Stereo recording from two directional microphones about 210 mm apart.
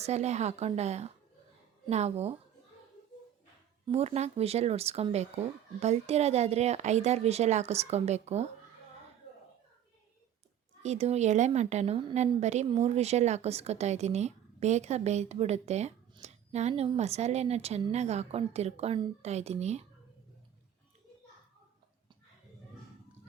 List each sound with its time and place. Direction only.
0.0 s a woman's voice: 30° right (ahead or behind)
3.8 s a woman's voice: 30° right (ahead or behind)
10.8 s a woman's voice: 30° right (ahead or behind)